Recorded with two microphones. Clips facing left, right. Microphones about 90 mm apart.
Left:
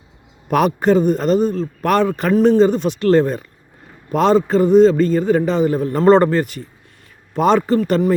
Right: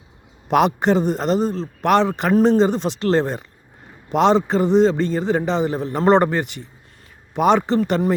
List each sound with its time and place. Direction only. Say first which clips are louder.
0.4 s a man's voice: left 1 dB; 25° right (ahead or behind)